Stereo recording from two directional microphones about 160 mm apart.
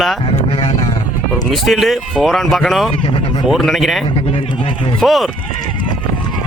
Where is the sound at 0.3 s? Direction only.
35° left (ahead or behind).